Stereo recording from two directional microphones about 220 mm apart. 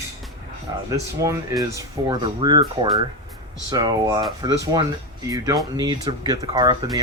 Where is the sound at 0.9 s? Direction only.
15° right (ahead or behind).